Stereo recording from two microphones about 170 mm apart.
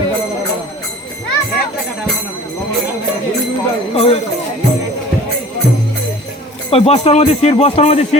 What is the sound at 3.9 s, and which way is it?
Speech, 35° left (ahead or behind).